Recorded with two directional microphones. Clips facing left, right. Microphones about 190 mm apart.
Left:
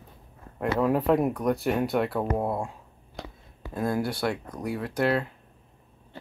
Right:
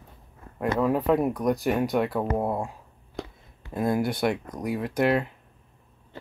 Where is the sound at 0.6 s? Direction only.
Centre (ahead or behind).